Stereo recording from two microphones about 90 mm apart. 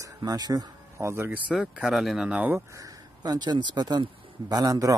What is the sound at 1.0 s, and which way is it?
Speech, 30° right (ahead or behind).